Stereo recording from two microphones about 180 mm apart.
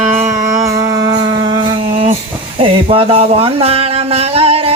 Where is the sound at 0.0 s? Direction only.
10° right (ahead or behind).